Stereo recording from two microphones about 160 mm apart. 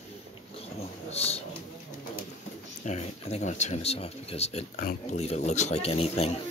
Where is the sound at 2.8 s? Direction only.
45° left (ahead or behind).